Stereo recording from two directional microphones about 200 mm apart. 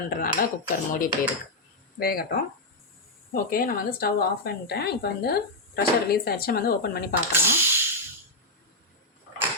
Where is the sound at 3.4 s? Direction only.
45° left (ahead or behind).